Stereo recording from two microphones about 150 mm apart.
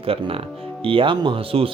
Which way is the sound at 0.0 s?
40° right (ahead or behind).